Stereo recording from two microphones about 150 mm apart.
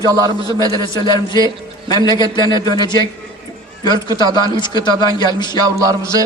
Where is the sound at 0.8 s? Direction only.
30° left (ahead or behind).